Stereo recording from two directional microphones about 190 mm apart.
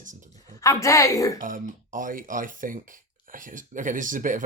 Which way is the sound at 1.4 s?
45° right (ahead or behind).